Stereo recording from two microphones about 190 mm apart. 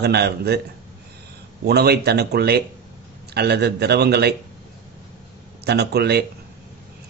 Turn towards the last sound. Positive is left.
turn(degrees=-60)  # may be behind; listen again after turning